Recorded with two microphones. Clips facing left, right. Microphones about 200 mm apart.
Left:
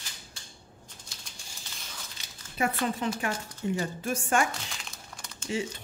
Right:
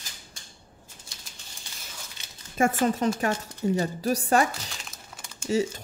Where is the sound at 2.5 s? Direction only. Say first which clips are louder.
Right 6 dB; 45° right (ahead or behind).